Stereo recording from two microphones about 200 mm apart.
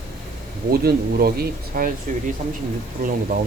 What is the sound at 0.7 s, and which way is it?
Speech, 50° right (ahead or behind).